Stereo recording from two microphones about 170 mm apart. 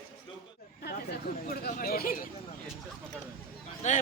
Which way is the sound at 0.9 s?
70° left (ahead or behind).